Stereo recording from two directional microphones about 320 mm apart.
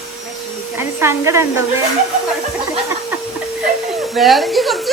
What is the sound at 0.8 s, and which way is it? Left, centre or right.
Speech, centre.